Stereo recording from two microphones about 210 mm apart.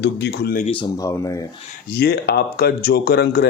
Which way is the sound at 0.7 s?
20° left (ahead or behind).